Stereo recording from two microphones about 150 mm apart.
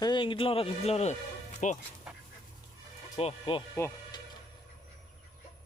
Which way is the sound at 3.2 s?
40° left (ahead or behind).